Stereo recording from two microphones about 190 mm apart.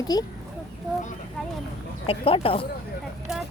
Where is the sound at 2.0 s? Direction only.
30° left (ahead or behind).